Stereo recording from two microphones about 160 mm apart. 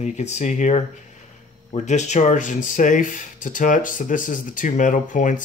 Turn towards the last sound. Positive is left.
turn(degrees=55)  # may be behind; listen again after turning